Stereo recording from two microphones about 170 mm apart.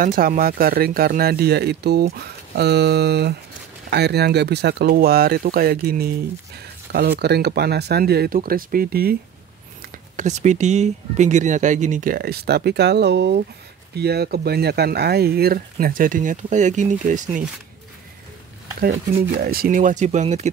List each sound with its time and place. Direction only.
0.0 s speech: 55° right (ahead or behind)
9.8 s speech: 45° right (ahead or behind)
19.4 s speech: 60° right (ahead or behind); by 20.4 s 40° right (ahead or behind)